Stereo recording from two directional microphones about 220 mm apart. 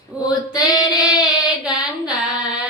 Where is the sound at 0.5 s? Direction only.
15° left (ahead or behind).